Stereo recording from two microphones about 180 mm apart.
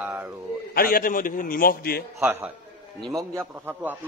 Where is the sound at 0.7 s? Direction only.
55° left (ahead or behind).